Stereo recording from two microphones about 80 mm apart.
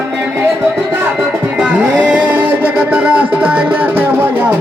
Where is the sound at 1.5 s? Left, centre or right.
Centre.